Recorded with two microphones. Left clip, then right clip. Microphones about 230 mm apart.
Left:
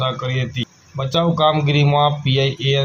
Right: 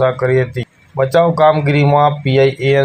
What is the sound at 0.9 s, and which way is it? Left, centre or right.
Speech, centre.